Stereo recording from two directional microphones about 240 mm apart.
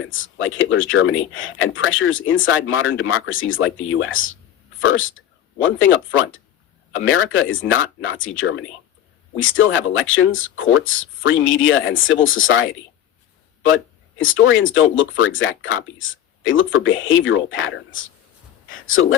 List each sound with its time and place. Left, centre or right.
0.0 s speech: left
14.2 s speech: left